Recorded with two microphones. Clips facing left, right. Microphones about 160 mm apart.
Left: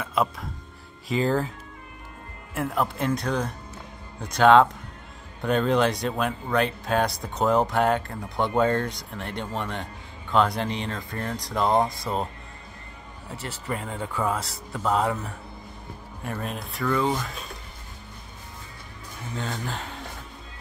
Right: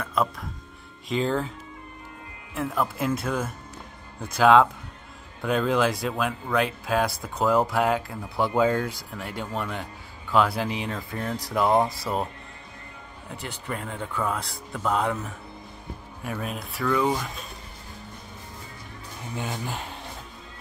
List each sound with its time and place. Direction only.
0.0 s speech: 5° left (ahead or behind)
2.5 s speech: centre (ahead or behind)
13.3 s speech: centre (ahead or behind)
19.3 s speech: 15° right (ahead or behind)